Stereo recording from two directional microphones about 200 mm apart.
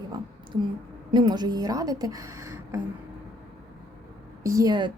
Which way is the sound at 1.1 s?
20° right (ahead or behind).